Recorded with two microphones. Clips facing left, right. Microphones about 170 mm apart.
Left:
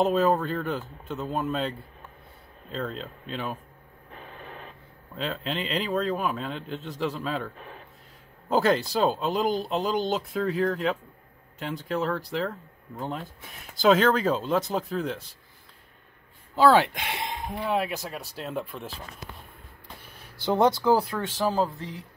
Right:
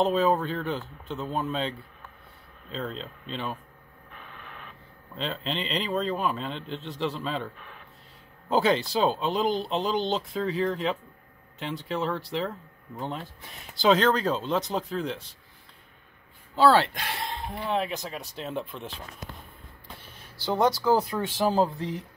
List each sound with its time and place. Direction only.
0.0 s speech: centre (ahead or behind)
4.1 s radio: 35° left (ahead or behind)
5.1 s speech: 5° left (ahead or behind)
16.5 s speech: 10° left (ahead or behind)
17.2 s a sound: 15° left (ahead or behind)
17.6 s speech: 5° left (ahead or behind)
20.4 s speech: 20° left (ahead or behind)
21.1 s speech: 5° right (ahead or behind)
21.5 s speech: 20° right (ahead or behind)